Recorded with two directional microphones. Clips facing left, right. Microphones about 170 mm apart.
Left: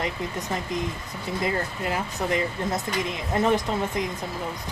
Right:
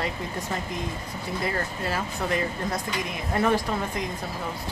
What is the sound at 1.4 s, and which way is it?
Speech, 20° left (ahead or behind).